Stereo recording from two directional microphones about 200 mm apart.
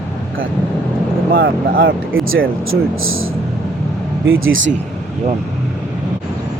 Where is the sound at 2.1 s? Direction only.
85° right.